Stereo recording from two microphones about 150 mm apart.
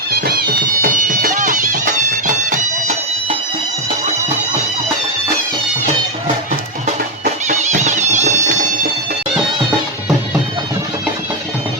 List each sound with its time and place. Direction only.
0.8 s music: 70° right (ahead or behind)
7.4 s music: 50° right (ahead or behind)